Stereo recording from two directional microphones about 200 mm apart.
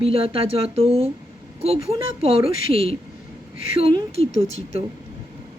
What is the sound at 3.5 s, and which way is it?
Speech, 45° left (ahead or behind).